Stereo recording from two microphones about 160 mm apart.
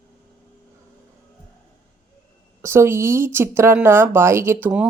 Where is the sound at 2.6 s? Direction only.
15° right (ahead or behind).